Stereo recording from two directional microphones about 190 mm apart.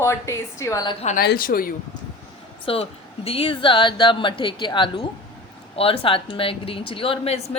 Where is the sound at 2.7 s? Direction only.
30° left (ahead or behind).